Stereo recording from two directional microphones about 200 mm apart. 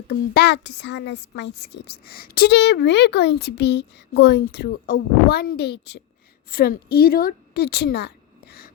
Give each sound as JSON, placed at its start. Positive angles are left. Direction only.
{"t": 0.1, "sound": "a woman's voice", "side_deg": 55}